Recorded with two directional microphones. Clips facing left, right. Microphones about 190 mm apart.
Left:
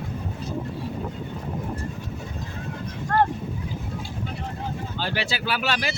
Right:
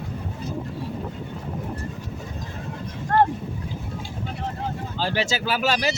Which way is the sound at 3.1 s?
25° right (ahead or behind).